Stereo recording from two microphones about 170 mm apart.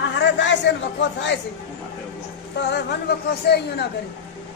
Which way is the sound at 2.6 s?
80° left.